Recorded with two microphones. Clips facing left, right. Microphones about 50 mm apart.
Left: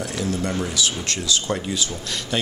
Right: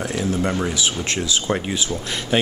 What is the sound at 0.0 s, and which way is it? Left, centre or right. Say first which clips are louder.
Speech: right 3 dB; right.